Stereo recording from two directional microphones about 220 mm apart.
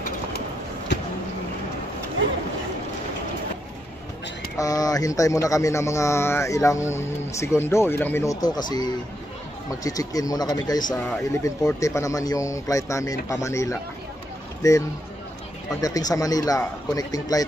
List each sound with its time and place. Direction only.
4.6 s speech: 15° left (ahead or behind)